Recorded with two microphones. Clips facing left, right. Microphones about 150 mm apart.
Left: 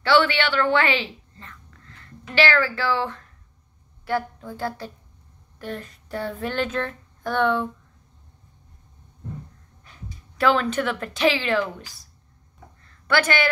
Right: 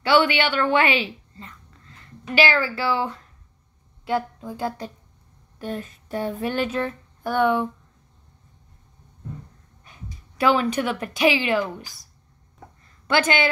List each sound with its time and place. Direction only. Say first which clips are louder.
0.0 s a woman's voice: right 1 dB; 15° right (ahead or behind)
4.0 s a sound: right 1 dB; 15° right (ahead or behind)
9.8 s a woman's voice: even; 15° right (ahead or behind)
13.0 s speech: right 1 dB; 20° right (ahead or behind)